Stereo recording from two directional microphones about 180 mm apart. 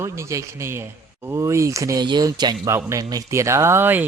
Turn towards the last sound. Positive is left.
turn(degrees=-10)  # may be behind; listen again after turning